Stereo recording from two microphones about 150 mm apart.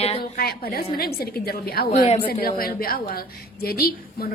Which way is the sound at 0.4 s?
90° left.